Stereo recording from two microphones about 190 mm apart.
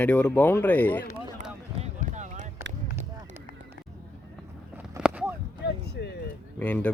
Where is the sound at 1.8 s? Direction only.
40° right (ahead or behind).